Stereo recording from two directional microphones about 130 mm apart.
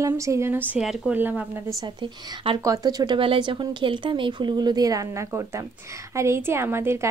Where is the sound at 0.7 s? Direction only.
5° right (ahead or behind).